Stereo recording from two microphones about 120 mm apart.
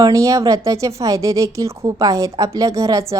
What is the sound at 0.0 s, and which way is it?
A woman's voice, 25° right (ahead or behind).